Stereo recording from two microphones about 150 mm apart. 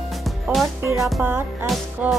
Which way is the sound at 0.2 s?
Centre (ahead or behind).